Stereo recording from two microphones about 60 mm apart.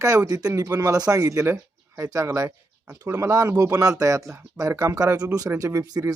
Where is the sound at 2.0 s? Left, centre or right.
Right.